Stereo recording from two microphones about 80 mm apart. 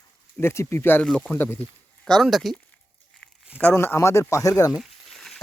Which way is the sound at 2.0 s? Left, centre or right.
Centre.